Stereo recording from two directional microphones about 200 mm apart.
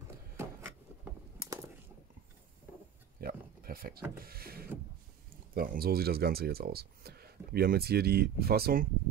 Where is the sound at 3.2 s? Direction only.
45° right (ahead or behind).